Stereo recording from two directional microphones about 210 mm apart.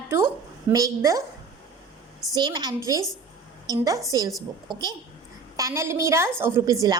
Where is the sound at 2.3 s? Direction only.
20° right (ahead or behind).